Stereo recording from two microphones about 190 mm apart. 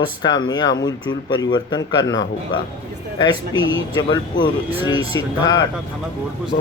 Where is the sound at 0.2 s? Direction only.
20° left (ahead or behind).